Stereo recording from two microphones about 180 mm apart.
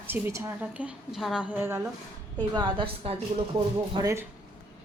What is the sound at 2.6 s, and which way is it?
Speech, 25° right (ahead or behind).